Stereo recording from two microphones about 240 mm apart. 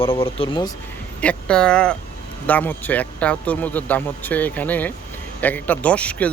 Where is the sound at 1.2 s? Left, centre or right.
Centre.